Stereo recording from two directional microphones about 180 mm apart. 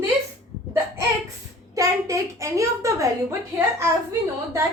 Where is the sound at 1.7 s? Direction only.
20° right (ahead or behind).